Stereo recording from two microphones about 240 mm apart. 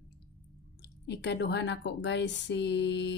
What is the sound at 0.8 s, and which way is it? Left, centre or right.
A woman's voice, left.